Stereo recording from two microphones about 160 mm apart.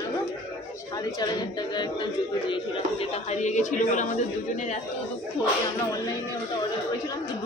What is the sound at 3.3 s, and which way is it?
Speech, 50° left (ahead or behind).